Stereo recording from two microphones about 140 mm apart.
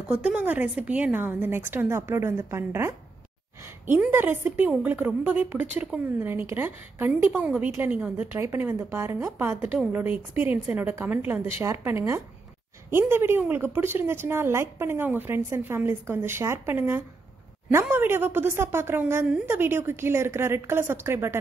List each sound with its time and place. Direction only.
0.1 s a woman's voice: 10° right (ahead or behind)